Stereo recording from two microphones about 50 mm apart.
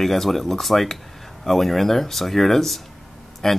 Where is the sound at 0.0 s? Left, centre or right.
Centre.